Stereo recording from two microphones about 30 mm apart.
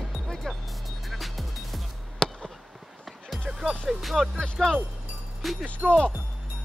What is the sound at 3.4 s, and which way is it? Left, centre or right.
Music, centre.